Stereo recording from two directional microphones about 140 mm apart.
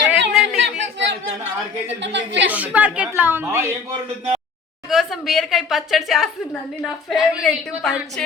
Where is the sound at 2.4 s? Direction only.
10° right (ahead or behind).